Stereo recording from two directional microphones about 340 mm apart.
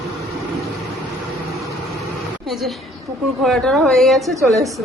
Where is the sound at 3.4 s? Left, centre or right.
Centre.